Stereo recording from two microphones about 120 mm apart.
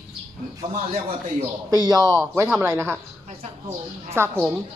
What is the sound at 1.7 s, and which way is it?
Speech, 30° right (ahead or behind).